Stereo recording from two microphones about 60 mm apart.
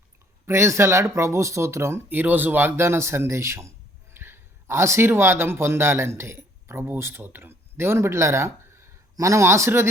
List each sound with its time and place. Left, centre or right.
0.4 s speech: right
2.0 s speech: right
9.1 s speech: right